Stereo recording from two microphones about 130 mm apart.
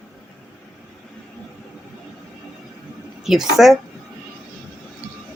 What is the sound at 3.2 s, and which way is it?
Speech, centre (ahead or behind).